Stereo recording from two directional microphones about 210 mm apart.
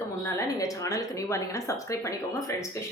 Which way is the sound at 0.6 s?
15° left (ahead or behind).